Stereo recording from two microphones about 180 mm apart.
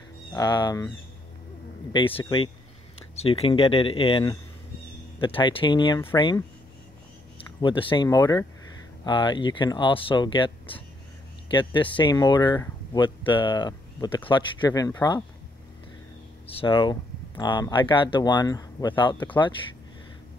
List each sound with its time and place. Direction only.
0.3 s speech: 25° left (ahead or behind)
7.6 s speech: 30° left (ahead or behind)
16.4 s speech: 30° left (ahead or behind)